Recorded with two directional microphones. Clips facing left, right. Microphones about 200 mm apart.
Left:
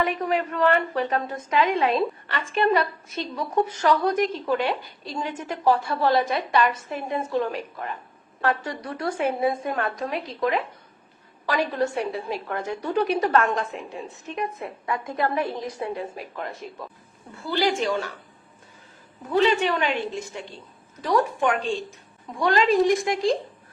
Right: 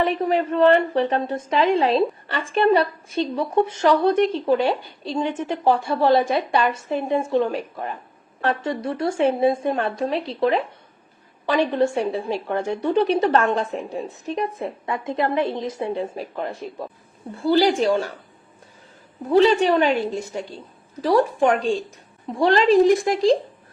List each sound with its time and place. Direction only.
0.0 s a woman's voice: 30° right (ahead or behind)
19.3 s a woman's voice: 35° right (ahead or behind)